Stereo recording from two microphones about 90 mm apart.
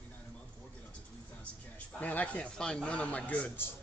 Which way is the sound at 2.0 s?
15° left (ahead or behind).